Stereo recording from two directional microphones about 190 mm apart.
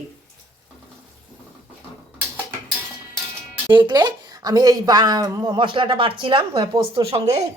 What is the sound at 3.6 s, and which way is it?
A woman's voice, 25° right (ahead or behind).